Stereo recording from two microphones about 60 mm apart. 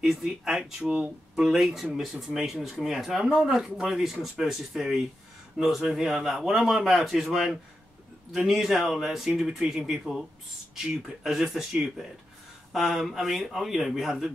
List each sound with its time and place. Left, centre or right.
0.0 s speech: centre
0.8 s speech: right
1.3 s a man's voice: centre